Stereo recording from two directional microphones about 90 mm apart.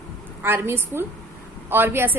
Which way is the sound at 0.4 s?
25° right (ahead or behind).